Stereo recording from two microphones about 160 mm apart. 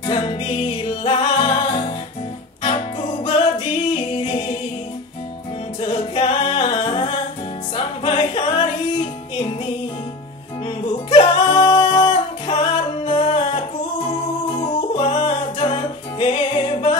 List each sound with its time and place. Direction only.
0.0 s music: 35° left (ahead or behind)
5.8 s music: 35° left (ahead or behind)
11.1 s singing: 35° left (ahead or behind)
14.6 s music: 35° left (ahead or behind)